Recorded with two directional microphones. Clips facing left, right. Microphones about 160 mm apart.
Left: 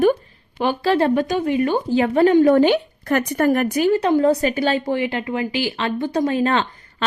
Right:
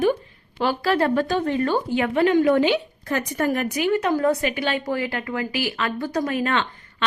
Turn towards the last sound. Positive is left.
turn(degrees=35)  # may be behind; listen again after turning